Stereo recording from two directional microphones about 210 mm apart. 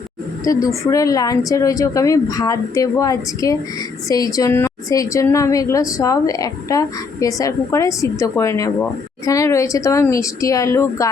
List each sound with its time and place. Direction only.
0.4 s a woman's voice: 15° left (ahead or behind)